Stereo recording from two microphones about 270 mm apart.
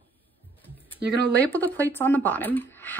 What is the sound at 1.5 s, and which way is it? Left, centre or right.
Speech, centre.